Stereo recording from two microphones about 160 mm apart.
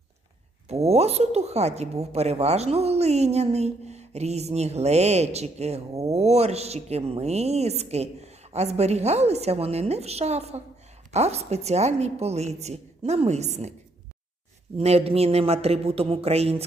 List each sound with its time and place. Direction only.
0.7 s a woman's voice: 40° right (ahead or behind)
5.9 s speech: 20° right (ahead or behind)
6.1 s a woman's voice: 40° right (ahead or behind)
14.8 s speech: 40° right (ahead or behind)